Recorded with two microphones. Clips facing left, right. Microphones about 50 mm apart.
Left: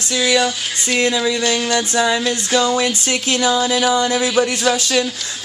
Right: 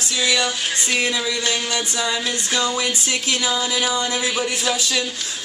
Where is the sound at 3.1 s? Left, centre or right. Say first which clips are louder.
Left 5 dB; left.